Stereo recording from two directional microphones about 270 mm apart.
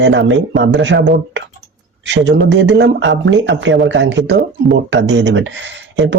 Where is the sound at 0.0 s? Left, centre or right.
Right.